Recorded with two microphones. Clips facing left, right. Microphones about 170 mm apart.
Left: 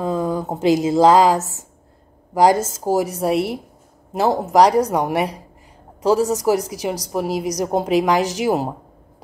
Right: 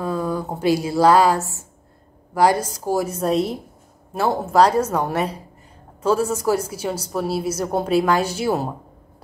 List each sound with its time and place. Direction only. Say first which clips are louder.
0.0 s a woman's voice: left 2 dB; 20° left (ahead or behind)